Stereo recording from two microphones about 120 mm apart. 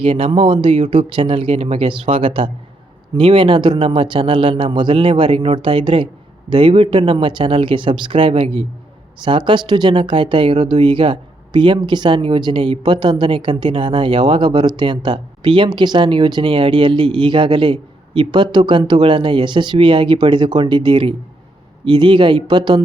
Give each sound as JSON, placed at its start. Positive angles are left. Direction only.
{"t": 0.0, "sound": "speech", "side_deg": -50}